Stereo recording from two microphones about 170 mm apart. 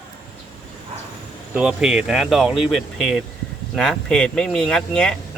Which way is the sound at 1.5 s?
5° right (ahead or behind).